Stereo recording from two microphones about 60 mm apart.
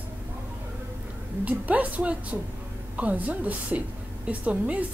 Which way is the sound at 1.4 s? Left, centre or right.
Right.